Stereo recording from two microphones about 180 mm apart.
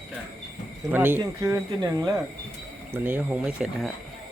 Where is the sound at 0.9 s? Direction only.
10° right (ahead or behind).